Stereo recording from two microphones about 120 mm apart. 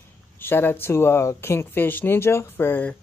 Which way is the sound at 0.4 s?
20° left (ahead or behind).